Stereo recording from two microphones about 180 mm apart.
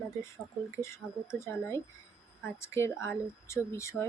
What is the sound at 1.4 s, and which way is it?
Speech, 15° left (ahead or behind).